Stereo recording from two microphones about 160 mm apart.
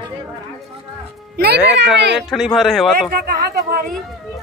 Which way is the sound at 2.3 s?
Centre (ahead or behind).